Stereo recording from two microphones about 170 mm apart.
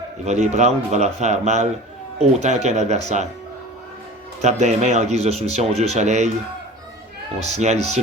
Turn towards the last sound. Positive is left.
turn(degrees=-40)  # may be behind; listen again after turning